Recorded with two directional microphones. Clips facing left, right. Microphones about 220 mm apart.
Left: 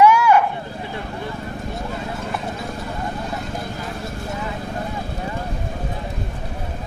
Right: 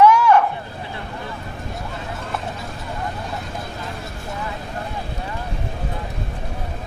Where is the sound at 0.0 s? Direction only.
10° left (ahead or behind).